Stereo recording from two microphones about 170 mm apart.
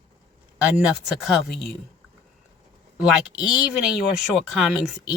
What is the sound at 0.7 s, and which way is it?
Speech, 5° right (ahead or behind).